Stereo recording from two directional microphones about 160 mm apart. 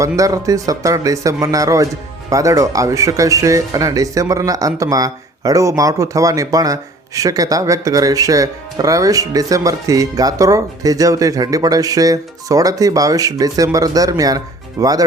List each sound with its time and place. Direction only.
0.2 s speech: 20° right (ahead or behind)